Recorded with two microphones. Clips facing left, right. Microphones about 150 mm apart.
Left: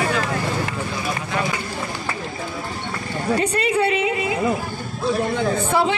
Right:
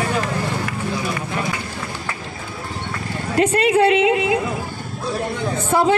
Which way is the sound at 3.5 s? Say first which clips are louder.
Right 5 dB; 90° right.